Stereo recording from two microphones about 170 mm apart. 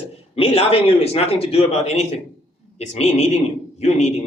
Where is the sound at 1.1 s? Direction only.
35° left (ahead or behind).